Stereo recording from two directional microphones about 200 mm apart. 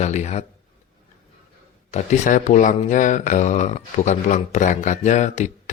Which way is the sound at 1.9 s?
40° left (ahead or behind).